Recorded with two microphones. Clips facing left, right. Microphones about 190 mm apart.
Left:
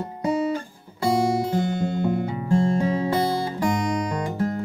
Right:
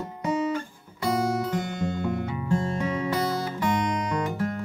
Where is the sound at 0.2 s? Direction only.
30° left (ahead or behind).